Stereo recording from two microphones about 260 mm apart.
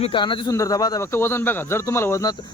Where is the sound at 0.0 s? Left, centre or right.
Centre.